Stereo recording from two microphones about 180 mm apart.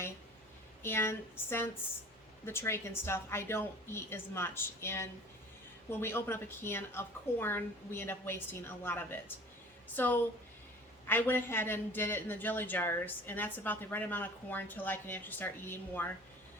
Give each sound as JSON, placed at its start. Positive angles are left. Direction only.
{"t": 0.8, "sound": "a man's voice", "side_deg": 15}